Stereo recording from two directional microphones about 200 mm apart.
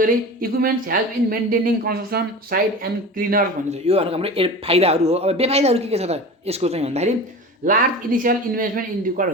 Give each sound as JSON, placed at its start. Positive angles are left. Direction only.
{"t": 0.0, "sound": "speech", "side_deg": -45}
{"t": 3.8, "sound": "speech", "side_deg": -30}